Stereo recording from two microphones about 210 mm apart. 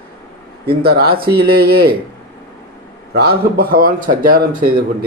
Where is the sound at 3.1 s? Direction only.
50° right (ahead or behind).